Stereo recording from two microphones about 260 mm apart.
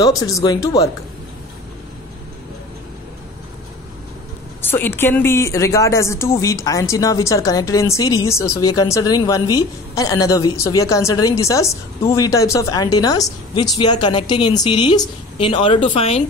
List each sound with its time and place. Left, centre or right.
0.0 s speech: centre
4.6 s a woman's voice: centre